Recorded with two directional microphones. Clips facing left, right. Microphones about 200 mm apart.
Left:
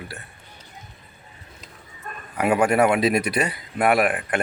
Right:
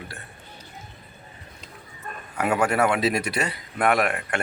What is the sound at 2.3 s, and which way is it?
Speech, 15° left (ahead or behind).